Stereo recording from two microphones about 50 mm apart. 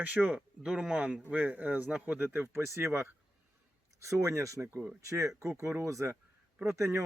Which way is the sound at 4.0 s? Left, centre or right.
Right.